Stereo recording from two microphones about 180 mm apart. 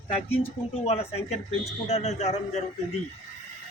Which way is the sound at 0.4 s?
35° left (ahead or behind).